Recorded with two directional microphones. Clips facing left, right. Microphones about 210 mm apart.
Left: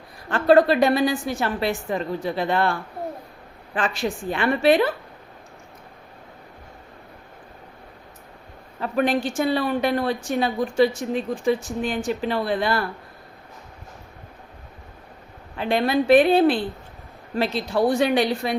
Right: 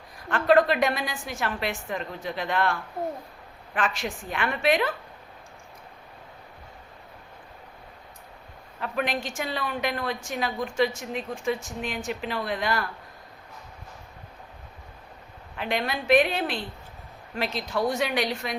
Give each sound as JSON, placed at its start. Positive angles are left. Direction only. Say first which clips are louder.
{"t": 0.3, "sound": "a woman's voice", "louder": "left 4 dB", "side_deg": 30}
{"t": 3.8, "sound": "a woman's voice", "louder": "left 4 dB", "side_deg": 30}
{"t": 8.8, "sound": "a woman's voice", "louder": "left 7 dB", "side_deg": 35}
{"t": 15.5, "sound": "a woman's voice", "louder": "left 8 dB", "side_deg": 30}